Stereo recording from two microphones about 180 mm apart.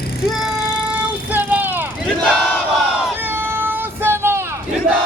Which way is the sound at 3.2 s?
10° right (ahead or behind).